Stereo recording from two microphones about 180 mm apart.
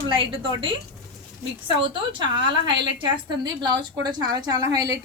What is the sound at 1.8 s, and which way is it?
A woman's voice, 25° right (ahead or behind).